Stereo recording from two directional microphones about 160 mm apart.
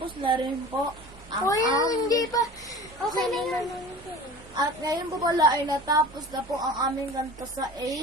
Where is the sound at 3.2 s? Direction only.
Centre (ahead or behind).